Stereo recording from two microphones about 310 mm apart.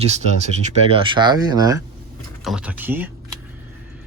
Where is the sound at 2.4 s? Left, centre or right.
Centre.